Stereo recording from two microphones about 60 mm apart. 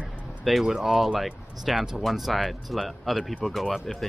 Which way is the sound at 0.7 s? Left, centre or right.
Centre.